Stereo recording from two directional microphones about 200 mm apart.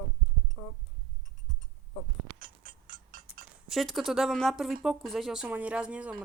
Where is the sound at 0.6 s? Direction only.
10° left (ahead or behind).